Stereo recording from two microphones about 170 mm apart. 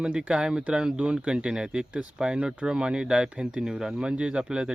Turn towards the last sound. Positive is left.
turn(degrees=-5)  # may be behind; listen again after turning